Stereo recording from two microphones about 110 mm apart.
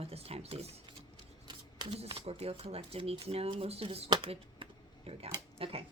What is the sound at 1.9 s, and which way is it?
Speech, 65° right (ahead or behind).